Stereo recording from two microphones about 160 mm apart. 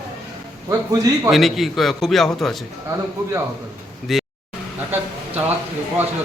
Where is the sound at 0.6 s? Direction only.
20° right (ahead or behind).